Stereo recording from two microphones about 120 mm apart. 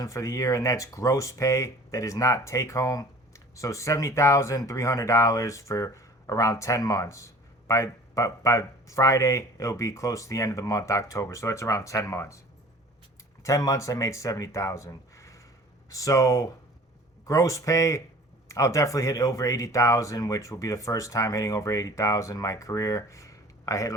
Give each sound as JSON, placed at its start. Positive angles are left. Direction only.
{"t": 0.0, "sound": "speech", "side_deg": 25}
{"t": 13.4, "sound": "speech", "side_deg": 25}